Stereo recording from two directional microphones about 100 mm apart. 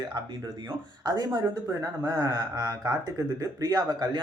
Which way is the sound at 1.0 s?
40° right (ahead or behind).